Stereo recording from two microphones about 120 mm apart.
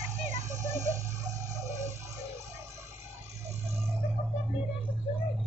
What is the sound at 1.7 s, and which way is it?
Music, 25° right (ahead or behind).